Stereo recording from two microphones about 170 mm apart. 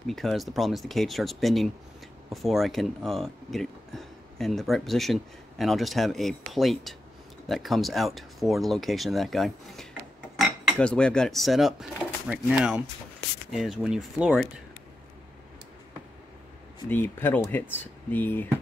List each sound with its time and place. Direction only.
0.0 s speech: centre (ahead or behind)
16.9 s speech: 10° left (ahead or behind)